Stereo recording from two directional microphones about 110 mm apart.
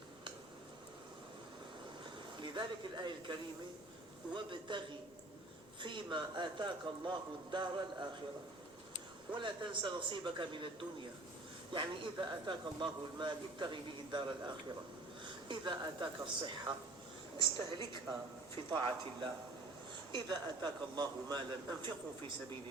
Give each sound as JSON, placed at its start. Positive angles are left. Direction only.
{"t": 2.4, "sound": "speech", "side_deg": -45}
{"t": 4.4, "sound": "a man's voice", "side_deg": -45}
{"t": 5.8, "sound": "a man's voice", "side_deg": -45}
{"t": 9.3, "sound": "a man's voice", "side_deg": -45}
{"t": 20.1, "sound": "speech", "side_deg": -40}